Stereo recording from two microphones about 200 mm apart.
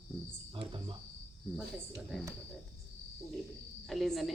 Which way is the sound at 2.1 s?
Centre (ahead or behind).